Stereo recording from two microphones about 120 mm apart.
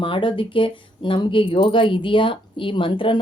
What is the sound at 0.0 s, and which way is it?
Speech, 45° left (ahead or behind).